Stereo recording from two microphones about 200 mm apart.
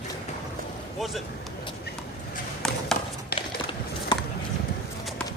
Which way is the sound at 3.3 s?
25° left (ahead or behind).